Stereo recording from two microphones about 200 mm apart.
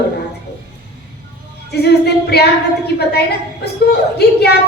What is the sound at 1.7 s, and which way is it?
A woman's voice, 55° left (ahead or behind).